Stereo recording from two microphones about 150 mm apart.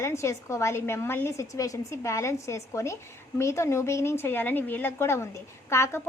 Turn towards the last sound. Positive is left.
turn(degrees=20)  # may be behind; listen again after turning